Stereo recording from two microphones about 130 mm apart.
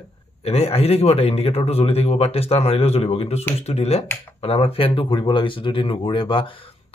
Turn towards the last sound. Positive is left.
turn(degrees=40)  # may be behind; listen again after turning